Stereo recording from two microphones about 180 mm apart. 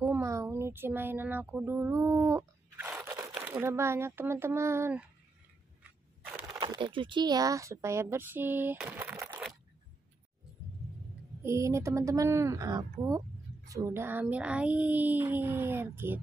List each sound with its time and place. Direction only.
0.0 s a sound: 15° right (ahead or behind)
3.3 s speech: 10° right (ahead or behind)
6.6 s speech: 25° right (ahead or behind)
11.4 s speech: 15° right (ahead or behind)